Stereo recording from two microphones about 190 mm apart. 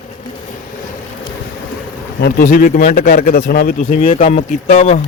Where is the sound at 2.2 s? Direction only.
50° left (ahead or behind).